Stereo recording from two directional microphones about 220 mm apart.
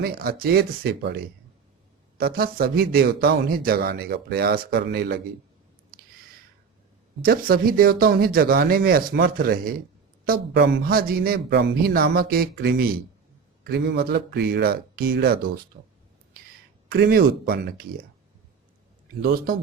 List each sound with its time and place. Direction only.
0.0 s a man's voice: 45° right (ahead or behind)
7.2 s a man's voice: 40° right (ahead or behind)
16.9 s a man's voice: 45° right (ahead or behind)
19.2 s a man's voice: 40° right (ahead or behind)